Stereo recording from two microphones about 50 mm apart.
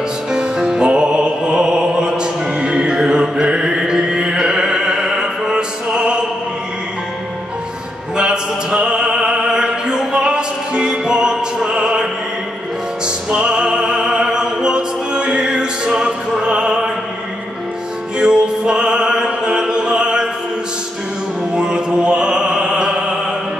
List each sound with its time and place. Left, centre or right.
0.3 s music: centre
8.2 s music: centre
18.2 s music: centre
21.5 s music: centre